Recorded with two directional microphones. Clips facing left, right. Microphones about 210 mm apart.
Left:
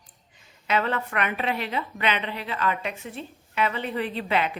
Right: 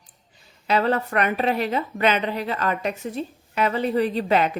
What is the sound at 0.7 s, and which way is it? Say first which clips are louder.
A woman's voice: right 5 dB; 35° right (ahead or behind).